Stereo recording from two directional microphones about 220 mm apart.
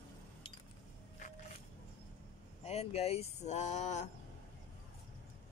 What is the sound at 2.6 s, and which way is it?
Speech, 30° left (ahead or behind).